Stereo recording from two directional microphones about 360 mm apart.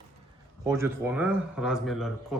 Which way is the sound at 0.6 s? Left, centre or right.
Centre.